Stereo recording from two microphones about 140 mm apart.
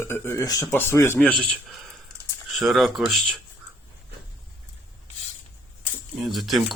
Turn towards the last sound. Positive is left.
turn(degrees=0)  # may be behind; listen again after turning